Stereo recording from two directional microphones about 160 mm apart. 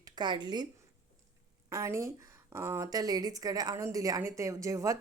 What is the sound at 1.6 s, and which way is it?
A woman's voice, 20° right (ahead or behind).